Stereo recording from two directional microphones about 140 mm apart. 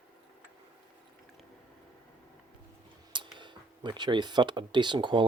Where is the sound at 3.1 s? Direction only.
35° right (ahead or behind).